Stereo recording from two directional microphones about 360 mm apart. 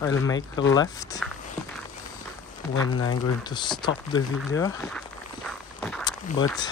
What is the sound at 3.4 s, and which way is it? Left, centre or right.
Speech, centre.